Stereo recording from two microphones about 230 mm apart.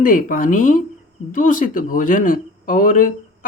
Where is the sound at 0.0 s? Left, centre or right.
Left.